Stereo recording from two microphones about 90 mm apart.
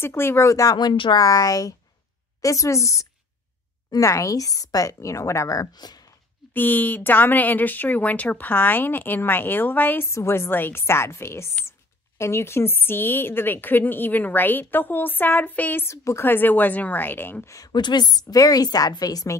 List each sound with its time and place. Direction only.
0.0 s a woman's voice: 25° left (ahead or behind)
0.7 s speech: 65° left (ahead or behind)
1.1 s a woman's voice: 45° left (ahead or behind)
6.5 s a woman's voice: 20° left (ahead or behind)
17.5 s a woman's voice: 45° left (ahead or behind)